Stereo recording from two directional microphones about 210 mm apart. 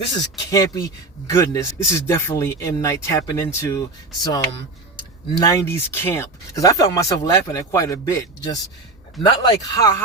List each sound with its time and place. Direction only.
0.5 s speech: 15° left (ahead or behind)
5.4 s speech: 15° left (ahead or behind)